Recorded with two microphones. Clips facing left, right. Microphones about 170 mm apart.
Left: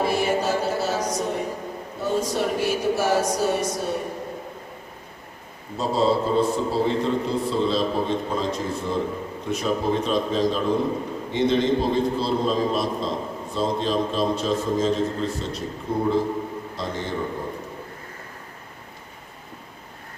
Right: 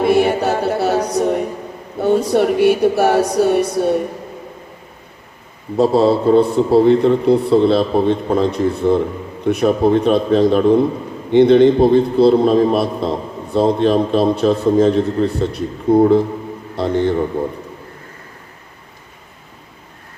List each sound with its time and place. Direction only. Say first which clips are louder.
0.0 s music: right 8 dB; 65° right (ahead or behind)
2.0 s a man's voice: right 10 dB; 60° right (ahead or behind)
5.7 s a man's voice: right 8 dB; 65° right (ahead or behind)